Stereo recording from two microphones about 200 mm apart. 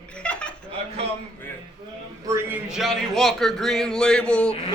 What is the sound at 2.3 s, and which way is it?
Speech, 5° right (ahead or behind).